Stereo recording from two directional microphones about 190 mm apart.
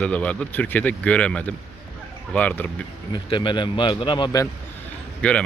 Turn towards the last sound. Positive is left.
turn(degrees=5)  # may be behind; listen again after turning